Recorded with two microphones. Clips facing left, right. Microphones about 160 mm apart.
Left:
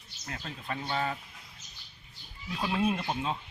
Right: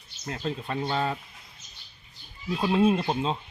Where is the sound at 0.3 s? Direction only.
30° right (ahead or behind).